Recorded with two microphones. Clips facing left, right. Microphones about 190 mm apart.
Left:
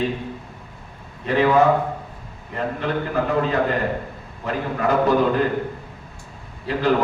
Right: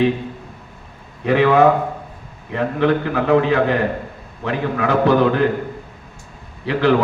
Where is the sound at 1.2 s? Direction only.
65° right (ahead or behind).